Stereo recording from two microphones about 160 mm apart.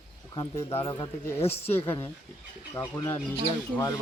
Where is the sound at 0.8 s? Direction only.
25° left (ahead or behind).